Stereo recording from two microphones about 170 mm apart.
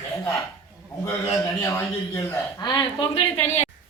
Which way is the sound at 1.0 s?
15° left (ahead or behind).